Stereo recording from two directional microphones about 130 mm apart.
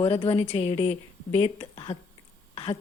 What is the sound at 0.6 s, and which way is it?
A woman's voice, 30° left (ahead or behind).